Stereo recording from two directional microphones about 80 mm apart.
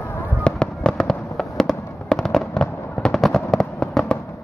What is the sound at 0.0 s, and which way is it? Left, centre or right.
Fireworks, left.